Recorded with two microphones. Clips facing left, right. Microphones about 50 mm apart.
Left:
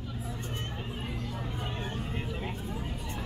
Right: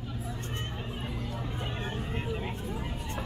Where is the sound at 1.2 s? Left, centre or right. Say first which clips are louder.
Right 1 dB; centre.